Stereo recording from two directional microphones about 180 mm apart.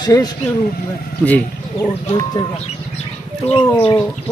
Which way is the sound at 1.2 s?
10° left (ahead or behind).